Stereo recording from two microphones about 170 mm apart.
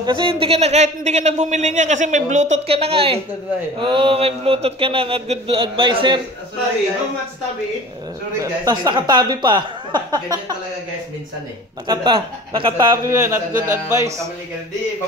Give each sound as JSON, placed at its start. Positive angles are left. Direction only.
{"t": 0.0, "sound": "speech", "side_deg": -30}
{"t": 8.4, "sound": "speech", "side_deg": -20}
{"t": 11.9, "sound": "a man's voice", "side_deg": -25}